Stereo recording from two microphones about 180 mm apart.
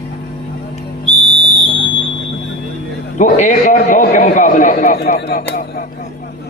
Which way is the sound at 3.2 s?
45° left (ahead or behind).